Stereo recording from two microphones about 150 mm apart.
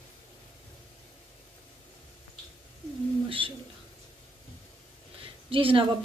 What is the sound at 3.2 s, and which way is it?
Speech, 35° right (ahead or behind).